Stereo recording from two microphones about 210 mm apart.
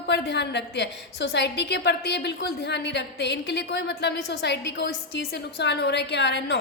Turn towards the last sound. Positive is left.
turn(degrees=55)  # may be behind; listen again after turning